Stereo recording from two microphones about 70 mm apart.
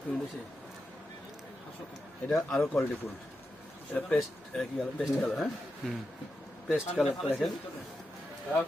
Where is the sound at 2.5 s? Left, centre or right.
Centre.